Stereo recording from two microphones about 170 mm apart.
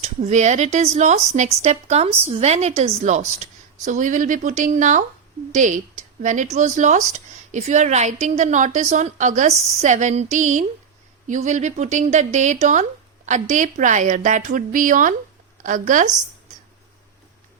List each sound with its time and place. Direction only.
0.0 s speech: 45° right (ahead or behind)